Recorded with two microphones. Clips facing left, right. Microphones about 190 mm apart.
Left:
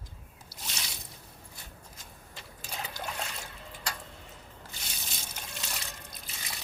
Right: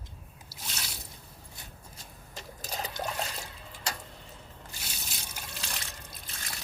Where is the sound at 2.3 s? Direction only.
40° right (ahead or behind).